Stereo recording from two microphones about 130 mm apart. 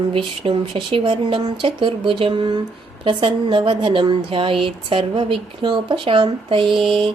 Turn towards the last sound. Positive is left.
turn(degrees=-40)  # may be behind; listen again after turning